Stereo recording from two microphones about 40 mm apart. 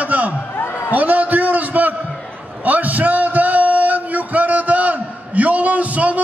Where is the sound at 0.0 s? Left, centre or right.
Right.